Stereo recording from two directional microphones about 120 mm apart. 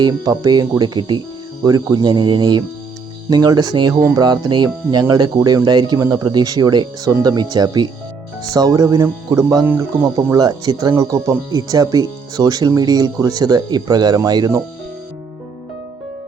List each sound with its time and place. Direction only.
0.1 s speech: 35° right (ahead or behind)
9.6 s speech: 20° right (ahead or behind)
10.3 s speech: 35° right (ahead or behind)